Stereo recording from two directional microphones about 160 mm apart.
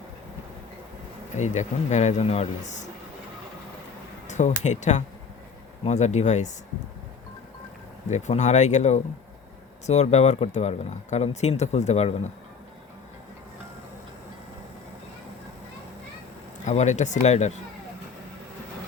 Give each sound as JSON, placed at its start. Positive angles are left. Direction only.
{"t": 1.4, "sound": "speech", "side_deg": 45}
{"t": 4.3, "sound": "speech", "side_deg": 45}
{"t": 8.1, "sound": "speech", "side_deg": 45}
{"t": 16.6, "sound": "speech", "side_deg": 45}